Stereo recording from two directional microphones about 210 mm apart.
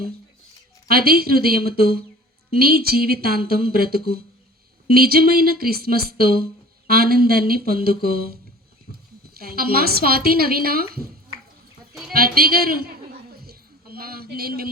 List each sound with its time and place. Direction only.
0.9 s a woman's voice: 45° right (ahead or behind)
8.9 s horse: 40° left (ahead or behind)
9.4 s a woman's voice: 45° right (ahead or behind)
12.1 s a woman's voice: 45° right (ahead or behind)
13.4 s a sound: 45° right (ahead or behind)